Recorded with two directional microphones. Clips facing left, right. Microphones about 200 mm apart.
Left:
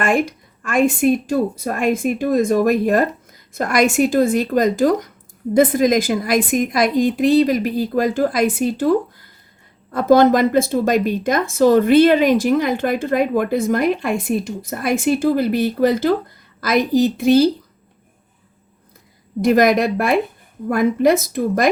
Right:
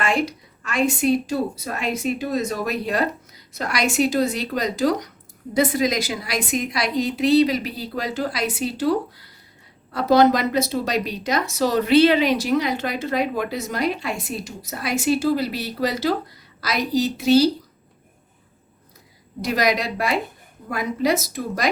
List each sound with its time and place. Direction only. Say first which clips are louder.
0.0 s a woman's voice: left 4 dB; 50° left (ahead or behind)
19.4 s a woman's voice: left 8 dB; 50° left (ahead or behind)